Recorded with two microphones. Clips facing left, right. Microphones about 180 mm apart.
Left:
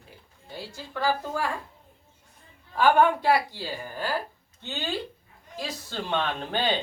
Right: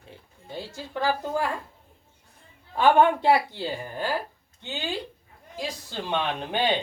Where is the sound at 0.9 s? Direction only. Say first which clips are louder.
Right 1 dB; 20° right (ahead or behind).